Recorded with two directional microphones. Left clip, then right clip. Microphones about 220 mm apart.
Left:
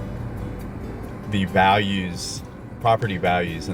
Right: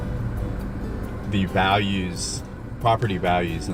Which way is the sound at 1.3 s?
20° left (ahead or behind).